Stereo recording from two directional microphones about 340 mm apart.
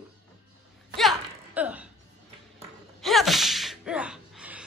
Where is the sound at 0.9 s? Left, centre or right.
Centre.